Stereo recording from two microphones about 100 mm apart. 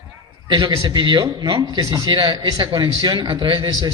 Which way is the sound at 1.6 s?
40° right (ahead or behind).